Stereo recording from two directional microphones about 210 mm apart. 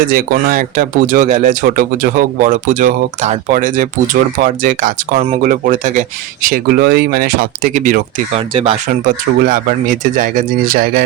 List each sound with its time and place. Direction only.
0.1 s speech: 40° right (ahead or behind)
8.4 s speech: 25° right (ahead or behind)
9.0 s speech: 40° right (ahead or behind)